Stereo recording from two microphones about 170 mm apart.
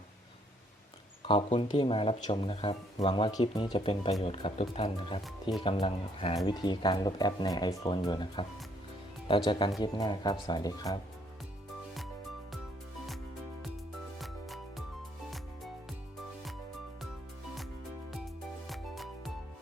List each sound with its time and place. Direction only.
1.2 s speech: 30° left (ahead or behind)
5.2 s speech: centre (ahead or behind)
5.6 s speech: 30° left (ahead or behind)
14.2 s music: centre (ahead or behind)
18.7 s music: centre (ahead or behind)